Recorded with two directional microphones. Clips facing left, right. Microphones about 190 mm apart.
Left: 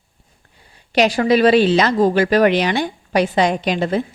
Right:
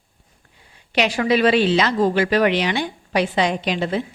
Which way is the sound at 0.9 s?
40° left (ahead or behind).